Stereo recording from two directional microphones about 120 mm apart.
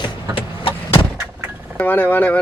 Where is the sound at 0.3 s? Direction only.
45° left (ahead or behind).